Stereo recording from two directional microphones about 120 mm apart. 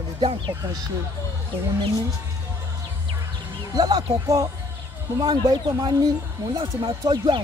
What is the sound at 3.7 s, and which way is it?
Speech, 35° right (ahead or behind).